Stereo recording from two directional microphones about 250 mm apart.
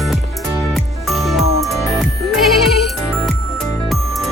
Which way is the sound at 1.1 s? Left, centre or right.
Centre.